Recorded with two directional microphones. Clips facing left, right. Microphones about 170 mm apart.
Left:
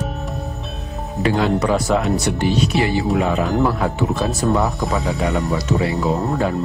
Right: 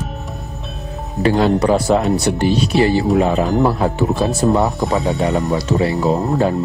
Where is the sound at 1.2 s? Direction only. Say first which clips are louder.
Right 4 dB; 35° right (ahead or behind).